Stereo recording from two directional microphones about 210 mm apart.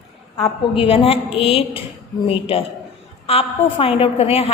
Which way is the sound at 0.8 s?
25° left (ahead or behind).